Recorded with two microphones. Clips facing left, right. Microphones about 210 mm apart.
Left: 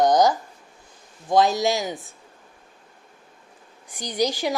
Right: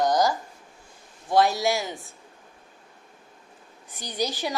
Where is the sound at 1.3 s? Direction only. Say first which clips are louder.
Left 2 dB; 20° left (ahead or behind).